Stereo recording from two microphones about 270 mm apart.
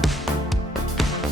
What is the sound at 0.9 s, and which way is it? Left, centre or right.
Music, centre.